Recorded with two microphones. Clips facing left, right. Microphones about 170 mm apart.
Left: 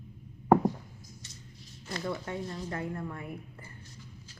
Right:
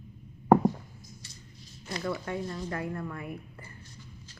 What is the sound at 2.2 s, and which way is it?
Speech, 25° left (ahead or behind).